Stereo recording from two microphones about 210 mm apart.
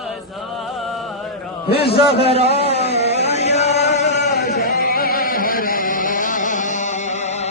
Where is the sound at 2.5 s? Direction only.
30° left (ahead or behind).